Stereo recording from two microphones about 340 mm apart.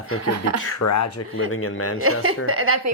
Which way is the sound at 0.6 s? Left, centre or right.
Left.